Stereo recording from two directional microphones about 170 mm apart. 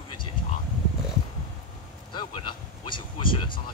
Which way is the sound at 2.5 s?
30° left (ahead or behind).